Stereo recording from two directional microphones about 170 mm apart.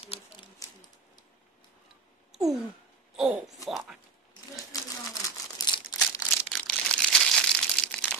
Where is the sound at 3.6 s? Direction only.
Centre (ahead or behind).